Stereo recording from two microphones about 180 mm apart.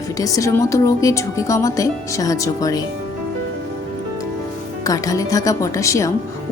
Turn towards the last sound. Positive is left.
turn(degrees=15)  # may be behind; listen again after turning